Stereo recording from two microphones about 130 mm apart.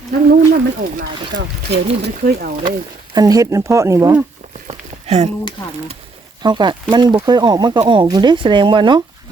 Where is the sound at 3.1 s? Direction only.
30° right (ahead or behind).